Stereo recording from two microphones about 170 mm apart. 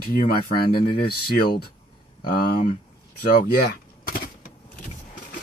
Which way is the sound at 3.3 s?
65° left (ahead or behind).